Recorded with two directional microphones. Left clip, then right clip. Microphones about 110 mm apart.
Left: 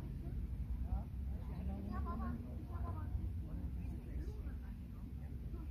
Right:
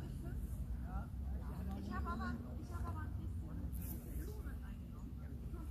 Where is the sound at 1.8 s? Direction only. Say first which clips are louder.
Right 3 dB; 20° right (ahead or behind).